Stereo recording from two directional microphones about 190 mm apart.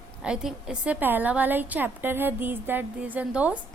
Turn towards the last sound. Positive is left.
turn(degrees=-5)  # may be behind; listen again after turning